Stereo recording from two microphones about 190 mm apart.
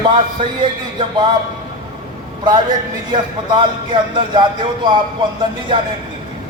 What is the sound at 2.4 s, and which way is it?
A man's voice, 25° right (ahead or behind).